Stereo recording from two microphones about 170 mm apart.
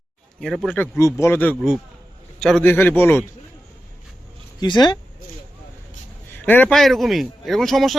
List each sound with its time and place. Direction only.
0.3 s speech: centre (ahead or behind)
0.8 s a man's voice: 15° left (ahead or behind)
4.6 s speech: 25° left (ahead or behind)
6.3 s speech: 10° left (ahead or behind)